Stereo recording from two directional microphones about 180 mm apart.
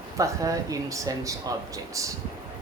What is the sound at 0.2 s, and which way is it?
Speech, 20° right (ahead or behind).